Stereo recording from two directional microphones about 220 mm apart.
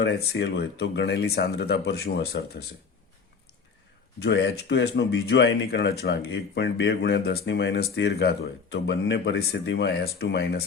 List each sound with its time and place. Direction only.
0.0 s speech: 50° left (ahead or behind)
4.2 s speech: 50° left (ahead or behind)